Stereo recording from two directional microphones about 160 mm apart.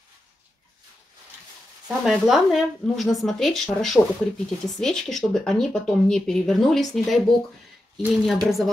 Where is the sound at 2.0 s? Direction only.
Centre (ahead or behind).